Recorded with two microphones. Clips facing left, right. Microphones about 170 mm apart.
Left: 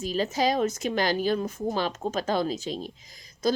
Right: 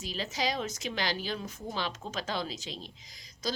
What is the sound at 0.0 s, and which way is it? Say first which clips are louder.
A woman's voice: left 8 dB; 45° left (ahead or behind).